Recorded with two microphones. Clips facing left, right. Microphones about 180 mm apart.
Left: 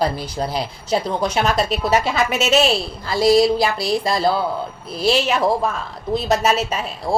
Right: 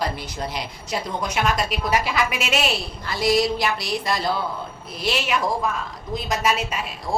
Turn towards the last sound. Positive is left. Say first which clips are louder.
# left 5 dB
turn(degrees=30)  # may be behind; listen again after turning